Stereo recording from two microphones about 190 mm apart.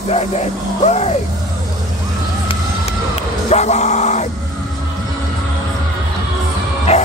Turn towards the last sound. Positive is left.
turn(degrees=35)  # may be behind; listen again after turning